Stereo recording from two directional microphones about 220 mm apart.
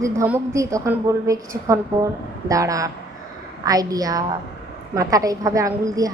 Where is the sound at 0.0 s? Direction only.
15° right (ahead or behind).